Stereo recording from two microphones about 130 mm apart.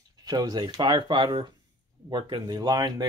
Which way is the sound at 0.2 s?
30° right (ahead or behind).